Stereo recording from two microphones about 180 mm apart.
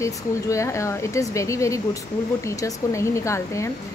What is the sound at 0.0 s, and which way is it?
Speech, 15° left (ahead or behind).